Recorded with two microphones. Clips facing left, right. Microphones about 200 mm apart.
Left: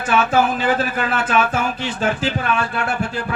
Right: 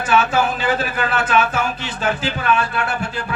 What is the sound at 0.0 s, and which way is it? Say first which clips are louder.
A man's voice: even; 55° left (ahead or behind).